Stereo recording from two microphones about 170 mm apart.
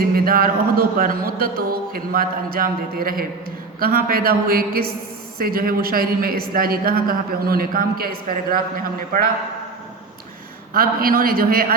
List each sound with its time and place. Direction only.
0.0 s speech: 60° right (ahead or behind)
10.8 s speech: 60° right (ahead or behind)